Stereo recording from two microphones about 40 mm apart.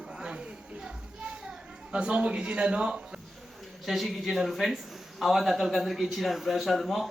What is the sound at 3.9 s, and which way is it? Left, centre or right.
A man's voice, centre.